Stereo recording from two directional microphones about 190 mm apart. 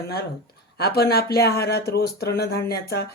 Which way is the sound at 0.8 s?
55° left (ahead or behind).